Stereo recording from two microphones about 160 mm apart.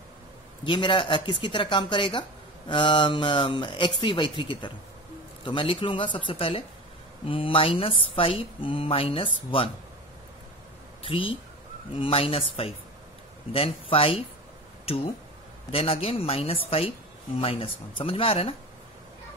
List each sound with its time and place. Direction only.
0.7 s speech: 30° left (ahead or behind)
11.0 s speech: 35° left (ahead or behind)
15.7 s speech: 35° left (ahead or behind)